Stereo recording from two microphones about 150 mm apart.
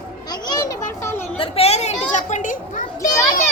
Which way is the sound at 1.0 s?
15° left (ahead or behind).